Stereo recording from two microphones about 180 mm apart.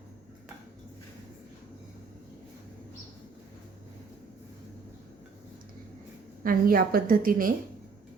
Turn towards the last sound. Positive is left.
turn(degrees=-50)  # may be behind; listen again after turning